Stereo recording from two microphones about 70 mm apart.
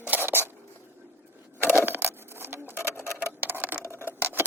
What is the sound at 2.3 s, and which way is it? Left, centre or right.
Sewing machine, right.